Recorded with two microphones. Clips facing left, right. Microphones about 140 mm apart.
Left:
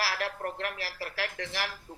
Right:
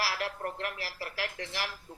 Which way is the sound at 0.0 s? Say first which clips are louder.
Left 1 dB; 25° right (ahead or behind).